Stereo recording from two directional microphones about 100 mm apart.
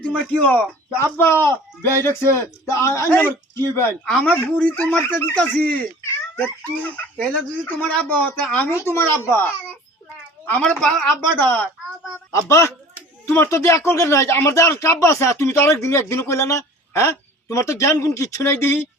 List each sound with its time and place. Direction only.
0.0 s speech: 15° left (ahead or behind)
1.1 s speech: 25° left (ahead or behind)
3.1 s speech: 20° left (ahead or behind)
4.0 s speech: 5° left (ahead or behind); by 9.5 s 25° left (ahead or behind)
10.4 s speech: 10° left (ahead or behind)
12.5 s speech: 30° left (ahead or behind)